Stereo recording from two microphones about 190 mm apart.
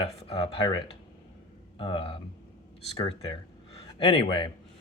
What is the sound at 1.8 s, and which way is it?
Speech, 25° left (ahead or behind).